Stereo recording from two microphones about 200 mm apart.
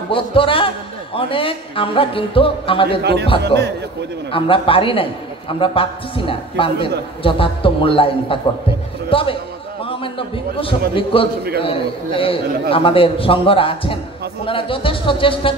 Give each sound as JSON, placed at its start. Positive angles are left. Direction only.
{"t": 0.1, "sound": "speech", "side_deg": 25}
{"t": 3.0, "sound": "a man's voice", "side_deg": -55}
{"t": 4.3, "sound": "a man's voice", "side_deg": 25}